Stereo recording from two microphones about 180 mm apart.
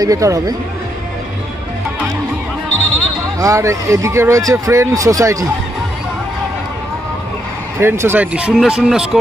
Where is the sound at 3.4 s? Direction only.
15° right (ahead or behind).